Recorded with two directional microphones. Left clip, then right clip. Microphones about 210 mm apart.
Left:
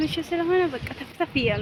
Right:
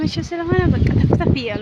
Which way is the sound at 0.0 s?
15° right (ahead or behind).